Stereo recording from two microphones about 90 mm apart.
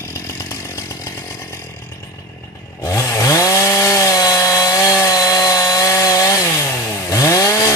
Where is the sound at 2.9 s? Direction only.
35° left (ahead or behind).